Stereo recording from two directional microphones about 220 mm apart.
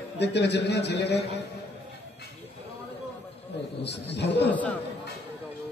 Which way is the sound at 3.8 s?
50° left (ahead or behind).